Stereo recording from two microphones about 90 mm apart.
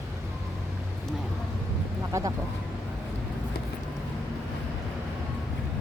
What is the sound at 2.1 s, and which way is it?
Vehicle, 35° right (ahead or behind).